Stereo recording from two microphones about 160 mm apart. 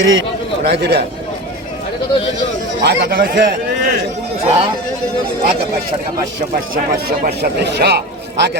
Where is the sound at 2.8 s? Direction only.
80° right.